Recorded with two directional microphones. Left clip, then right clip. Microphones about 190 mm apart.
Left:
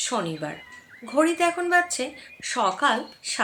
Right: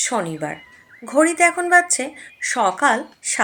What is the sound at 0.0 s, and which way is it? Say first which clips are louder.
Speech: right 5 dB; 25° right (ahead or behind).